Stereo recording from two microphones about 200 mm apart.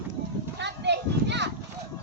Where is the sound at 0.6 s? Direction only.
60° right (ahead or behind).